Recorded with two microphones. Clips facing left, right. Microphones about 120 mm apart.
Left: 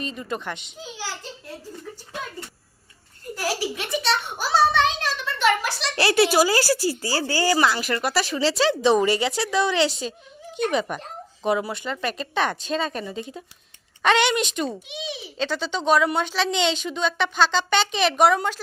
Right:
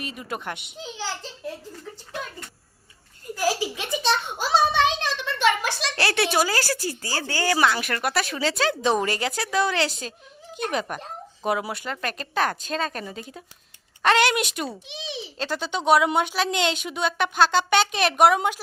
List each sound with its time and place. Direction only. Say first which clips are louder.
0.0 s a woman's voice: left 2 dB; 10° right (ahead or behind)
3.6 s a child's voice: even; 20° right (ahead or behind)
6.0 s speech: left 5 dB; 5° left (ahead or behind)
14.8 s a child's voice: left 1 dB; 25° right (ahead or behind)
15.4 s a woman's voice: left 2 dB; 5° right (ahead or behind)